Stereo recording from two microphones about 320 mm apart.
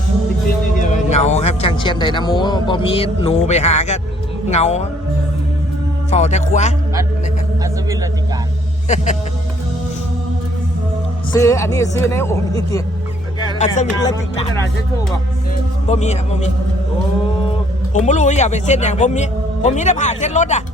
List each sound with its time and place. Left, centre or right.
0.8 s a man's voice: left
6.1 s a man's voice: left
11.3 s speech: centre
13.6 s a man's voice: left
14.0 s speech: centre
15.9 s a man's voice: left
17.9 s a man's voice: left